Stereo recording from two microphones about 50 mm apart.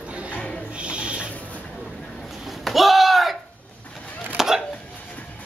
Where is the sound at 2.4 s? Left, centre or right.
Centre.